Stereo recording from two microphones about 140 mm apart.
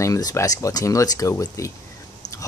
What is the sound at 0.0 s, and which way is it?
Speech, 25° left (ahead or behind).